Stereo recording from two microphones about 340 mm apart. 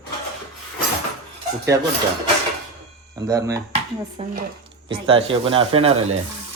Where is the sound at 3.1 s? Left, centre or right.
Centre.